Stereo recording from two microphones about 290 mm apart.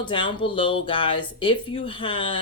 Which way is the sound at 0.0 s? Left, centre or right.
Centre.